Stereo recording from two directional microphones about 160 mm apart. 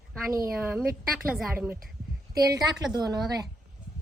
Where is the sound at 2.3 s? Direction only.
25° right (ahead or behind).